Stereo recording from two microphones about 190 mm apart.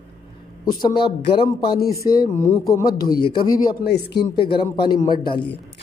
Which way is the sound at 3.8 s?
55° left (ahead or behind).